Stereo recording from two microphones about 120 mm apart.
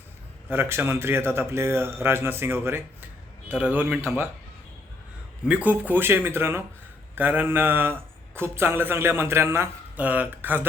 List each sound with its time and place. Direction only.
0.4 s speech: 20° right (ahead or behind)
5.5 s speech: 10° right (ahead or behind)